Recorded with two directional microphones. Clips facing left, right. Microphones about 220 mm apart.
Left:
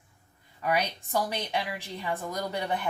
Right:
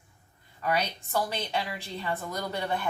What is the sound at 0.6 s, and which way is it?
Speech, 15° left (ahead or behind).